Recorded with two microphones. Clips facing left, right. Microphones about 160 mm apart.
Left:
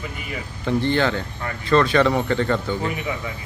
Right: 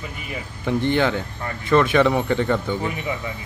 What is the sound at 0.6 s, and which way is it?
Speech, 15° right (ahead or behind).